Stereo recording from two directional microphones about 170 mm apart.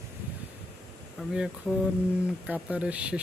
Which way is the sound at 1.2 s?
Centre (ahead or behind).